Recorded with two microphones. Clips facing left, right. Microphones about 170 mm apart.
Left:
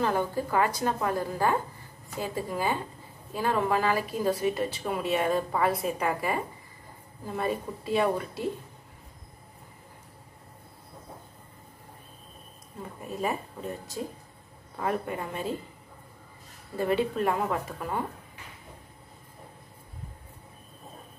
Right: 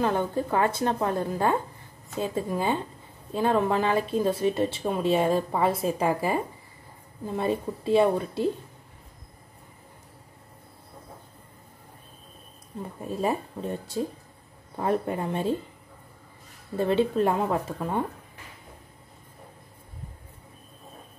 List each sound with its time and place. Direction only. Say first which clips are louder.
0.0 s a woman's voice: right 2 dB; 25° right (ahead or behind)
13.0 s a woman's voice: right 4 dB; 30° right (ahead or behind)
16.7 s a woman's voice: right 3 dB; 25° right (ahead or behind)